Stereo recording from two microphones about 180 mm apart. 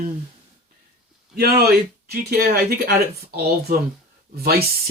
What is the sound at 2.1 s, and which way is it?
Speech, 55° right (ahead or behind).